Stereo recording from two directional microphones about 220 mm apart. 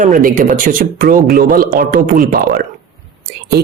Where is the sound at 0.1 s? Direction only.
35° right (ahead or behind).